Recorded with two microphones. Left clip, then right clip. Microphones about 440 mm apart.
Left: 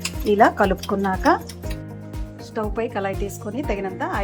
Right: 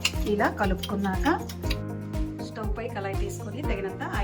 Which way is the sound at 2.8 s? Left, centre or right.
Centre.